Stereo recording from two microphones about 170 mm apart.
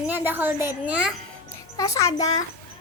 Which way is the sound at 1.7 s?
20° left (ahead or behind).